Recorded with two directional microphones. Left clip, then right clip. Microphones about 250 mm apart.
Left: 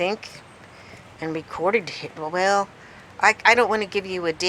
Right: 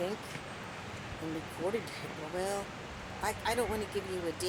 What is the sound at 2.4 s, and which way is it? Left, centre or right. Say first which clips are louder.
A woman's voice: left 16 dB; right.